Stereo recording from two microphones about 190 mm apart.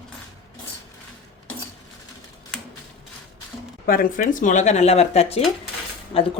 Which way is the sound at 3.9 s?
45° left (ahead or behind).